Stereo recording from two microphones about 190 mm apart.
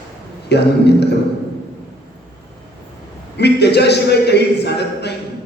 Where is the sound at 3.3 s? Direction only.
60° left (ahead or behind).